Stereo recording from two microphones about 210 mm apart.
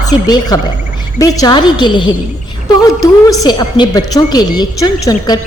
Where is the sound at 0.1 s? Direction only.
20° left (ahead or behind).